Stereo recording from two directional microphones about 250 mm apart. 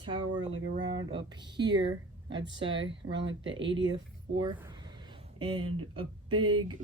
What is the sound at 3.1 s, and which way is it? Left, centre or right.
Speech, right.